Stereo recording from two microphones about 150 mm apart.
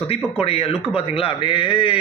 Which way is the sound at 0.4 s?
40° left (ahead or behind).